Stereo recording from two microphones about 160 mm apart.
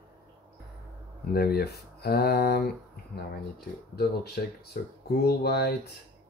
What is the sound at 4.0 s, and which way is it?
Speech, 80° left.